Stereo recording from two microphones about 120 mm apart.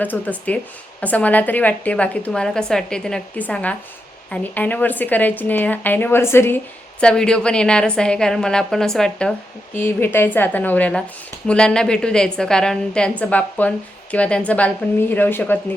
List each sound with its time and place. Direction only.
0.0 s a woman's voice: 15° left (ahead or behind)
7.0 s a woman's voice: 5° left (ahead or behind)
9.7 s a woman's voice: 20° left (ahead or behind)